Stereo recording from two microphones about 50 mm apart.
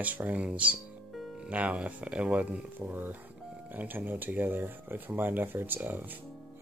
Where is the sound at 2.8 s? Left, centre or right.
Right.